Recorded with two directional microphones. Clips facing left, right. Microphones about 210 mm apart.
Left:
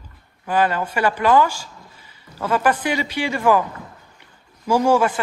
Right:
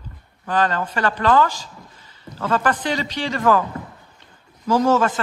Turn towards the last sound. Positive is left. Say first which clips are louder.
# left 1 dB
turn(degrees=10)  # may be behind; listen again after turning